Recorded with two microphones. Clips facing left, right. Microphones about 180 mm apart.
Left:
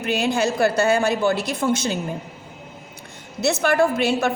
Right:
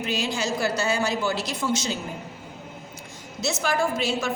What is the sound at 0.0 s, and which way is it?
A woman's voice, 55° left (ahead or behind).